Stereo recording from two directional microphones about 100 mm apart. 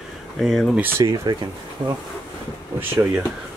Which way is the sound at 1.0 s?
40° right (ahead or behind).